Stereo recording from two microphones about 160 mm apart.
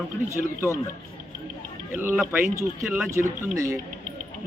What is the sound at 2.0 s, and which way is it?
Speech, 15° right (ahead or behind).